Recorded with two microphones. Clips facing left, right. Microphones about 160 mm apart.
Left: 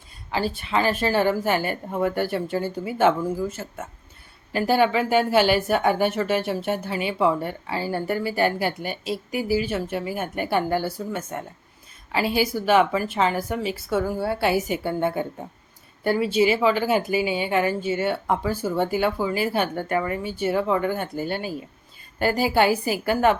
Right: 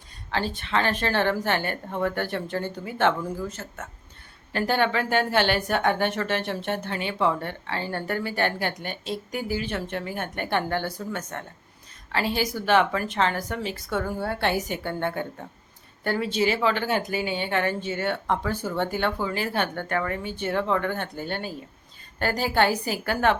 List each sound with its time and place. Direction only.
0.3 s speech: 5° left (ahead or behind)